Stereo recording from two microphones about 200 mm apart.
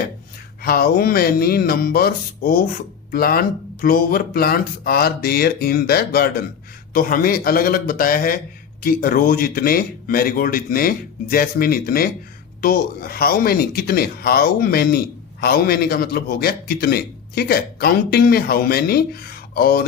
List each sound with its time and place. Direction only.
0.6 s speech: 50° left (ahead or behind)